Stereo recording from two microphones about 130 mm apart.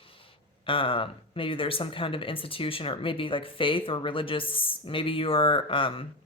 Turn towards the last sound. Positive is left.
turn(degrees=40)  # may be behind; listen again after turning